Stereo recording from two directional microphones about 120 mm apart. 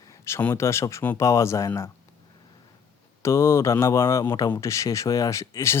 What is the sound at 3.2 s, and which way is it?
Speech, 25° left (ahead or behind).